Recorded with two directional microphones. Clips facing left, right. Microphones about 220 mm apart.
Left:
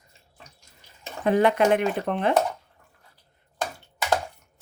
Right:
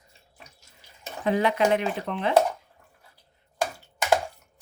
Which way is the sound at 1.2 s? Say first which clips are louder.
Left 3 dB; 50° left (ahead or behind).